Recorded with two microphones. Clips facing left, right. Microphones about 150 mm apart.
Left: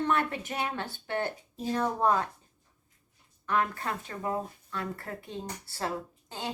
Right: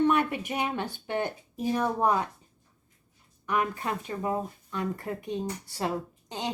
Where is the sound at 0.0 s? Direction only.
15° right (ahead or behind).